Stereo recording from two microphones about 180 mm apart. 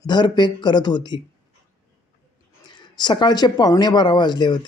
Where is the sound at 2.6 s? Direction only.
25° left (ahead or behind).